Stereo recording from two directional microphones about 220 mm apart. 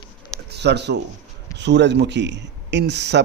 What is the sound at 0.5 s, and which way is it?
A man's voice, 50° right (ahead or behind).